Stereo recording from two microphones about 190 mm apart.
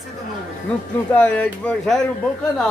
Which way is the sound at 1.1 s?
5° left (ahead or behind).